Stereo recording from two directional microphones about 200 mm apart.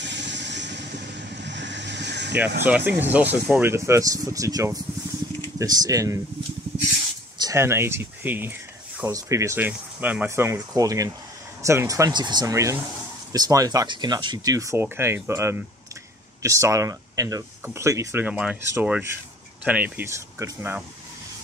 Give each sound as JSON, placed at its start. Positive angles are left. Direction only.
{"t": 0.0, "sound": "vehicle", "side_deg": -60}
{"t": 2.6, "sound": "speech", "side_deg": -10}
{"t": 7.3, "sound": "speech", "side_deg": -15}